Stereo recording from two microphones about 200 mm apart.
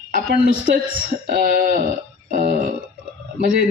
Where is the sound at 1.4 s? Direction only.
50° right (ahead or behind).